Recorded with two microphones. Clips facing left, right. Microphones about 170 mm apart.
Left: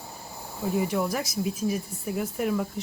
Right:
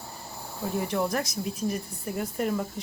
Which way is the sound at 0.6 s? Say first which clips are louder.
Left 2 dB; 5° left (ahead or behind).